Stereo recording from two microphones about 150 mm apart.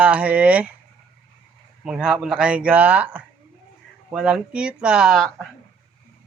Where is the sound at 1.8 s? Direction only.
5° right (ahead or behind).